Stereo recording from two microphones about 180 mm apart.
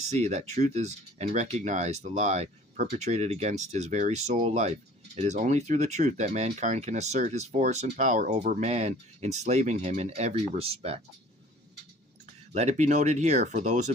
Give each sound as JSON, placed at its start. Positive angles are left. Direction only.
{"t": 0.1, "sound": "speech", "side_deg": -40}
{"t": 12.2, "sound": "speech", "side_deg": -40}